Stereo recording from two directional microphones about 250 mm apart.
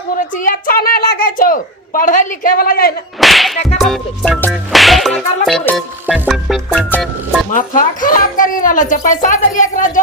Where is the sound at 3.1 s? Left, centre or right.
Centre.